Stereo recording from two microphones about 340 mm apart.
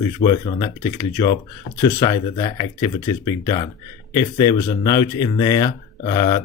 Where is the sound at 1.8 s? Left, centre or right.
Centre.